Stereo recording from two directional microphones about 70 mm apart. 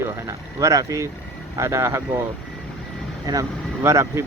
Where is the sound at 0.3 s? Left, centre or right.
Right.